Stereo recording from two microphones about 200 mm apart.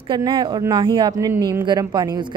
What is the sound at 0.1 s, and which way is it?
Speech, 20° right (ahead or behind).